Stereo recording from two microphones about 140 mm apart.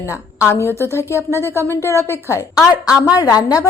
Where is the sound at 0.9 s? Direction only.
20° left (ahead or behind).